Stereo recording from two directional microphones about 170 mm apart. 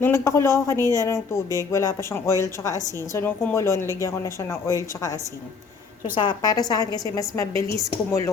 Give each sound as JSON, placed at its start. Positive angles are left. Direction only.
{"t": 0.0, "sound": "a woman's voice", "side_deg": 15}